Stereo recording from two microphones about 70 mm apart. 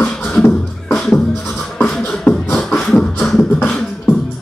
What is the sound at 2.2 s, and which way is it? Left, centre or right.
Beatboxing, centre.